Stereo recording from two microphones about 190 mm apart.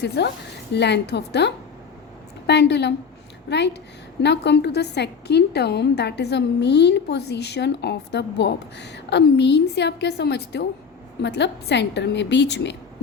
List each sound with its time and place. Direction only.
0.2 s a woman's voice: 65° left (ahead or behind)